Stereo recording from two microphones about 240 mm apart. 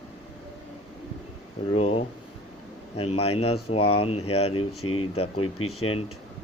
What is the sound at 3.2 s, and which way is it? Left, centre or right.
Speech, left.